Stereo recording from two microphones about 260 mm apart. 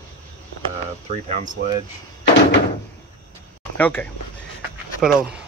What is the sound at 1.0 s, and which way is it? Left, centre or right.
Speech, right.